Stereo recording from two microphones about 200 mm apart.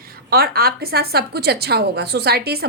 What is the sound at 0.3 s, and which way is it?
A woman's voice, 50° right (ahead or behind).